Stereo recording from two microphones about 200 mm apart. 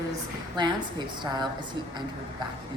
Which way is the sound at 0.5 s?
20° right (ahead or behind).